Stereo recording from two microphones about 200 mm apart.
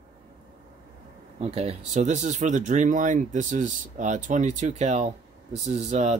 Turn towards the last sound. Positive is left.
turn(degrees=-35)  # may be behind; listen again after turning